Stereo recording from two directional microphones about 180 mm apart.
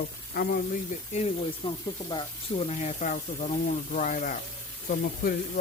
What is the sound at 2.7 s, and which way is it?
Speech, 40° left (ahead or behind).